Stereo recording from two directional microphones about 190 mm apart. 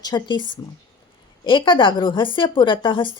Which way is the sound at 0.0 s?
20° left (ahead or behind).